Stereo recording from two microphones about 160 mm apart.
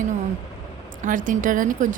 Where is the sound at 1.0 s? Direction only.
55° right (ahead or behind).